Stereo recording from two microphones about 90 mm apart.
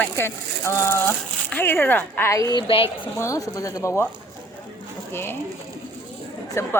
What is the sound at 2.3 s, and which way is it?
Speech, 40° left (ahead or behind).